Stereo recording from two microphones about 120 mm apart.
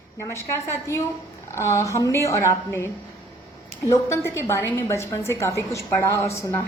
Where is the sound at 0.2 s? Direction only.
25° left (ahead or behind).